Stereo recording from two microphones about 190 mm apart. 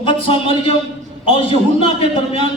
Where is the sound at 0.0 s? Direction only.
30° left (ahead or behind).